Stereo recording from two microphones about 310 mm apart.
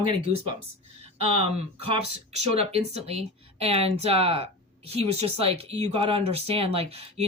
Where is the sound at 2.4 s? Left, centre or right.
Centre.